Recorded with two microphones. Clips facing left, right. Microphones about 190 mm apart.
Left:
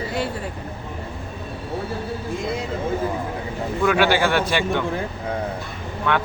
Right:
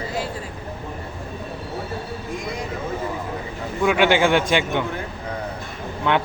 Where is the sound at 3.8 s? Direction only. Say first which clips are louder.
Right 2 dB; 15° right (ahead or behind).